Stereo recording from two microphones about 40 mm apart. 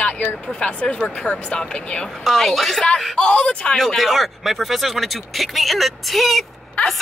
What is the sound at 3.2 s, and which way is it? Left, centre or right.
Speech, left.